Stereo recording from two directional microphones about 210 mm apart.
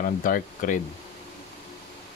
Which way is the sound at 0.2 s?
40° left (ahead or behind).